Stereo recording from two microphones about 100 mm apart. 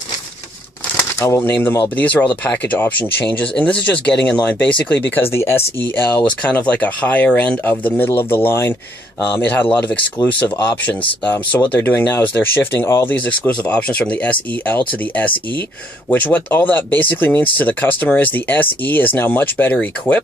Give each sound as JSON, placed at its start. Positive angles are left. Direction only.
{"t": 0.9, "sound": "speech", "side_deg": 25}
{"t": 10.8, "sound": "speech", "side_deg": 15}
{"t": 13.1, "sound": "speech", "side_deg": 15}